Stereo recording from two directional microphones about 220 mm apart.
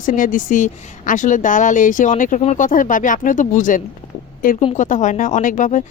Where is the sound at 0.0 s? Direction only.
40° left (ahead or behind).